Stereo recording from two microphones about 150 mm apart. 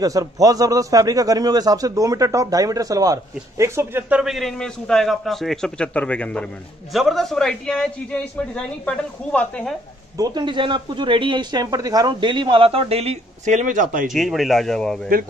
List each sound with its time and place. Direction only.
0.0 s a man's voice: 25° right (ahead or behind)
4.2 s a man's voice: centre (ahead or behind)
10.1 s speech: 25° right (ahead or behind); by 14.0 s 60° right (ahead or behind)
14.0 s a man's voice: centre (ahead or behind)